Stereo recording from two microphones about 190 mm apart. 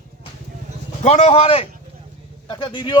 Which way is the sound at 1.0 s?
35° left (ahead or behind).